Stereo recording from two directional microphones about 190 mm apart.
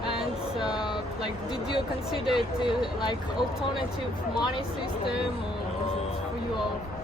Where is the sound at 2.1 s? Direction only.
Centre (ahead or behind).